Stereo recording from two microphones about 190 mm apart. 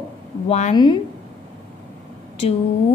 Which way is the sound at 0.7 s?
25° left (ahead or behind).